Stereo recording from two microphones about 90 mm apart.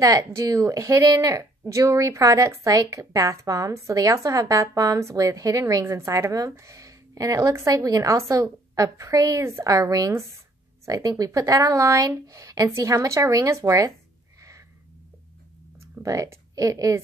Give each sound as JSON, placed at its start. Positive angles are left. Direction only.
{"t": 0.0, "sound": "a woman's voice", "side_deg": -35}
{"t": 16.0, "sound": "a woman's voice", "side_deg": -35}